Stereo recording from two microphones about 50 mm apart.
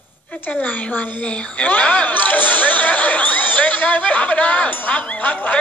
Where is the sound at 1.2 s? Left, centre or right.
Left.